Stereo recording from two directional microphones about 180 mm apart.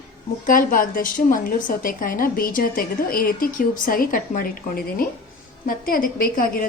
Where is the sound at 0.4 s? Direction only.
50° left (ahead or behind).